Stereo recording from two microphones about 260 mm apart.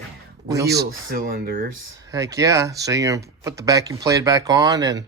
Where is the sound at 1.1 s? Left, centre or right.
Right.